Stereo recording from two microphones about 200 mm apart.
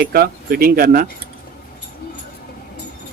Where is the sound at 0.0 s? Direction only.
50° right (ahead or behind).